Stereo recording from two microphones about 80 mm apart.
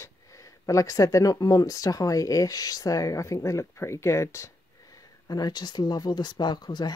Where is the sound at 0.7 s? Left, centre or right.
Left.